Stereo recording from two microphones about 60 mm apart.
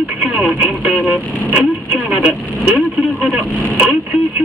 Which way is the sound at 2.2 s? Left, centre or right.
Right.